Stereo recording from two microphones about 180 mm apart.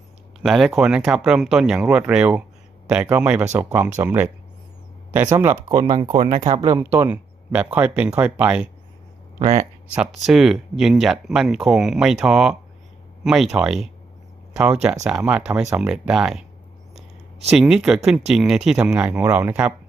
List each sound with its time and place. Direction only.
0.4 s speech: centre (ahead or behind); by 5.9 s 20° right (ahead or behind)
6.1 s speech: 45° right (ahead or behind)
6.7 s speech: 10° right (ahead or behind)
9.4 s speech: 30° right (ahead or behind)
9.9 s speech: 5° right (ahead or behind)
17.5 s speech: 5° right (ahead or behind)